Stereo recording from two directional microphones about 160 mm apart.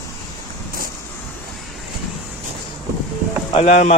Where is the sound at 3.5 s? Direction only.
45° left (ahead or behind).